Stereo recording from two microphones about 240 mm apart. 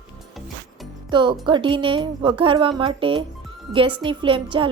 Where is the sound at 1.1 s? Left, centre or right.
Centre.